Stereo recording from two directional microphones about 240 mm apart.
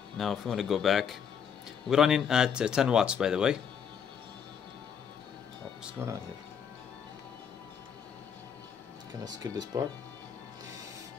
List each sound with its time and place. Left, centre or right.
0.2 s speech: centre
6.0 s speech: centre
9.2 s speech: centre